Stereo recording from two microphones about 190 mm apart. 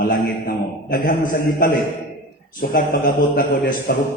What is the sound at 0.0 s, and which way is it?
A man's voice, 50° left (ahead or behind).